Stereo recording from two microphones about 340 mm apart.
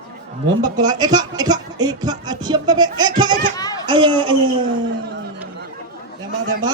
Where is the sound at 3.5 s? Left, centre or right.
Centre.